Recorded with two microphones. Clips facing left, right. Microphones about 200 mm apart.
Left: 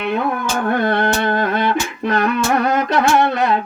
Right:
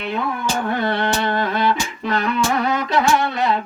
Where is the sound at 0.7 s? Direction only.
50° left (ahead or behind).